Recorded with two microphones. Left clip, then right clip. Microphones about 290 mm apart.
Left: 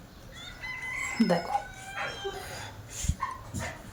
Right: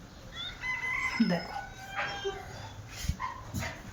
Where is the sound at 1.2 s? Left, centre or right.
Left.